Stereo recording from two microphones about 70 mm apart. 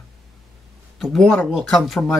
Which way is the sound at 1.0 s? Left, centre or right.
Centre.